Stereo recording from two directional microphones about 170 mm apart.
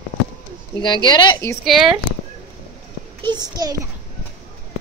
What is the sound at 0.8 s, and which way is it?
Speech, 25° left (ahead or behind).